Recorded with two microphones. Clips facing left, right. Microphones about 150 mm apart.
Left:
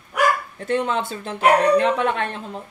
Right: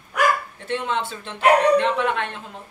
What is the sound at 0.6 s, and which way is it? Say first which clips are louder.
Speech: left 3 dB; 40° left (ahead or behind).